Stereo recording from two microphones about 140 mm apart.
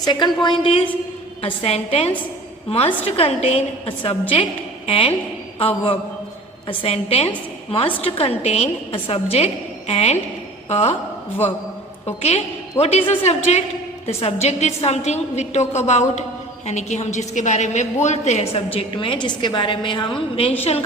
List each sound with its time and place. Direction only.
0.0 s a woman's voice: 30° left (ahead or behind); by 10.9 s 50° left (ahead or behind)
12.0 s a woman's voice: 50° left (ahead or behind)